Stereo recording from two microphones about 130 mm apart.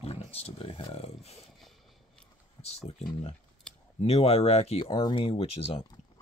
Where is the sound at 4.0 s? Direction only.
55° left (ahead or behind).